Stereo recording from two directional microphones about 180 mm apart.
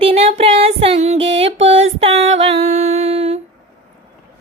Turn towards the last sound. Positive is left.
turn(degrees=-35)  # may be behind; listen again after turning